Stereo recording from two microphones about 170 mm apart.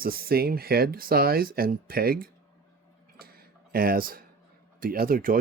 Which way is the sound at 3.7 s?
60° right (ahead or behind).